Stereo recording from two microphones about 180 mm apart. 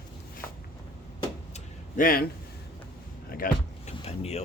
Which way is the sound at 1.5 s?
50° left (ahead or behind).